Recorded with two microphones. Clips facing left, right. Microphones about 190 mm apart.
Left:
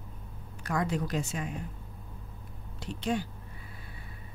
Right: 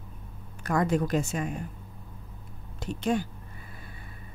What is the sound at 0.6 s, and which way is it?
Speech, 50° right (ahead or behind).